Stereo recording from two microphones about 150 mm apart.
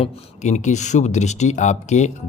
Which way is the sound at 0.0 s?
50° left (ahead or behind).